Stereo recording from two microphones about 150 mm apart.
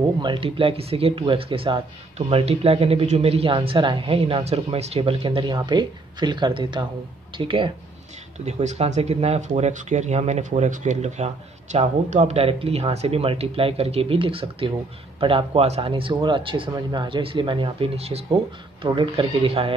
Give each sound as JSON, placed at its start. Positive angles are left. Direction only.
{"t": 0.2, "sound": "speech", "side_deg": -35}
{"t": 8.5, "sound": "speech", "side_deg": -45}